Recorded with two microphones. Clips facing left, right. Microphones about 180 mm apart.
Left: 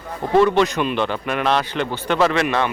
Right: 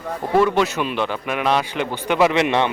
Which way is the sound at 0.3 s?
5° right (ahead or behind).